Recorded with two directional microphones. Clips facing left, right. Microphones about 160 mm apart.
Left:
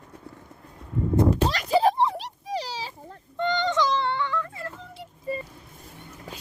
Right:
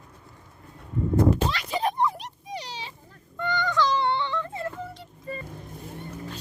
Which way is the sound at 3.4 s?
25° left (ahead or behind).